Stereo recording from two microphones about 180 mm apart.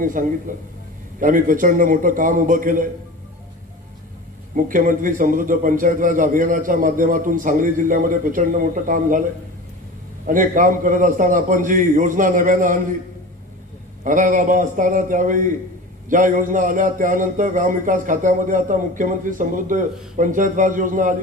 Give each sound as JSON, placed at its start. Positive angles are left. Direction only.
{"t": 0.0, "sound": "a man's voice", "side_deg": -50}
{"t": 4.5, "sound": "a man's voice", "side_deg": -50}
{"t": 10.2, "sound": "a man's voice", "side_deg": -45}
{"t": 14.0, "sound": "a man's voice", "side_deg": -45}